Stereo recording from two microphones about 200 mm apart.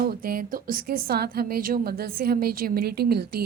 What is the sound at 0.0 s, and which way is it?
A woman's voice, 50° right (ahead or behind).